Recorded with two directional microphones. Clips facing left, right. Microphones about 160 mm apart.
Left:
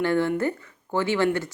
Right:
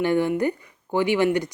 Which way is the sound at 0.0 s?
15° right (ahead or behind).